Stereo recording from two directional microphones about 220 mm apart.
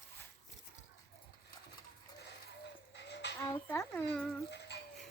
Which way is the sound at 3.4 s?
15° left (ahead or behind).